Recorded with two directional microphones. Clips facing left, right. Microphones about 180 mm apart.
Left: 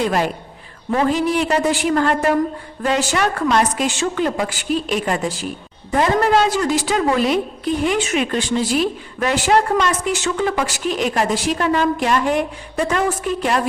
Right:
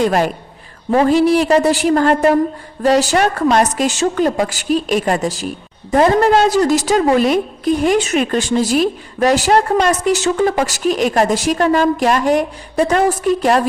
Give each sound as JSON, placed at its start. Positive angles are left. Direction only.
{"t": 0.0, "sound": "a man's voice", "side_deg": -45}